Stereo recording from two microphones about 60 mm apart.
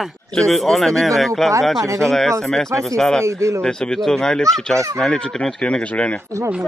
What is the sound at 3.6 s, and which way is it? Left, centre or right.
Speech, centre.